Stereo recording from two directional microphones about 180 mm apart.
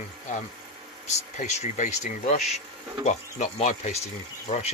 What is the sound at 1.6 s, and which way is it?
Speech, 45° left (ahead or behind).